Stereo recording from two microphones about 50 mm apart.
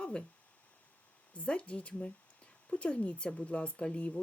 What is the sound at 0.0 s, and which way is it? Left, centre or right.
Speech, left.